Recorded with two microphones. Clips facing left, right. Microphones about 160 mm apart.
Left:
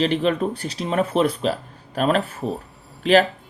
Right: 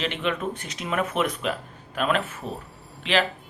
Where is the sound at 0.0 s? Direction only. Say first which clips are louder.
Left 7 dB; 35° left (ahead or behind).